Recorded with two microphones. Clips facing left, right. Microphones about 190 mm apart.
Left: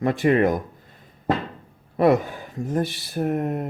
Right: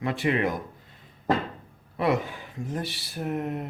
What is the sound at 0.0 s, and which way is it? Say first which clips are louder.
Speech: left 7 dB; 45° left (ahead or behind).